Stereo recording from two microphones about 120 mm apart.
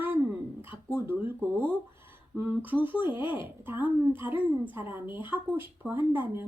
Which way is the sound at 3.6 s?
15° right (ahead or behind).